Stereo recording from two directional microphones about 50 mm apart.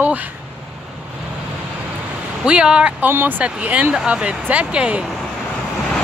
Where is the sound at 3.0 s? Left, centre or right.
Right.